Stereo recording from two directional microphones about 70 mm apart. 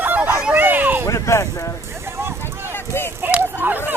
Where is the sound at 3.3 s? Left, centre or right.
Right.